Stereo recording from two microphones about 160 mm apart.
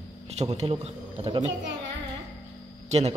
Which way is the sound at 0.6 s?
40° right (ahead or behind).